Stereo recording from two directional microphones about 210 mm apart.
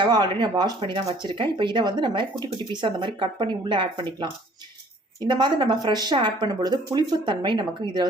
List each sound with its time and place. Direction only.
0.0 s speech: 20° right (ahead or behind)